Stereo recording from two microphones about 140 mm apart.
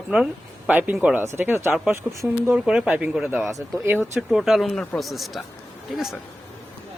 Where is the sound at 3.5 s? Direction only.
25° right (ahead or behind).